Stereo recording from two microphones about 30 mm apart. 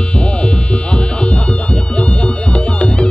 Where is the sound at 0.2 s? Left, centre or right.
Left.